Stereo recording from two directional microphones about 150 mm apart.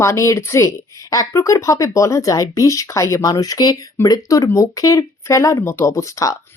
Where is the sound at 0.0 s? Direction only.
20° left (ahead or behind).